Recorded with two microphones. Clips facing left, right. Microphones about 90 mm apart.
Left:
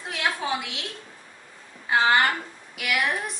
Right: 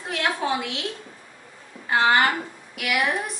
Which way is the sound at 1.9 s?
Centre (ahead or behind).